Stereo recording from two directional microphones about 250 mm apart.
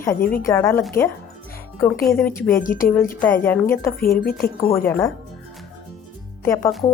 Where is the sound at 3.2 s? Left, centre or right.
Centre.